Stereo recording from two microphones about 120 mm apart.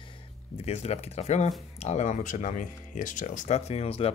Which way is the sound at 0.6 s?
65° left (ahead or behind).